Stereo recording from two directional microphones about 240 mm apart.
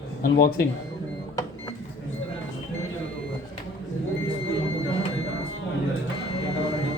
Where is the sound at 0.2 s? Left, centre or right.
Left.